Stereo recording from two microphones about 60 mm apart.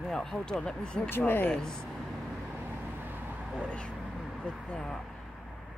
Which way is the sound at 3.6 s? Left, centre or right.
Centre.